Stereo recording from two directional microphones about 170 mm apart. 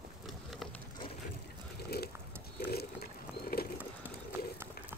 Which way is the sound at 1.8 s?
65° left (ahead or behind).